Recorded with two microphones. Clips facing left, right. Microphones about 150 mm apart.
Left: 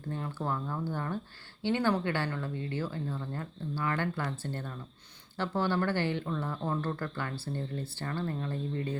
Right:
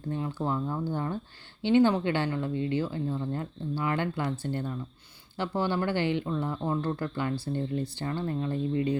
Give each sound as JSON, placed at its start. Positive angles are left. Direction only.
{"t": 0.1, "sound": "speech", "side_deg": -15}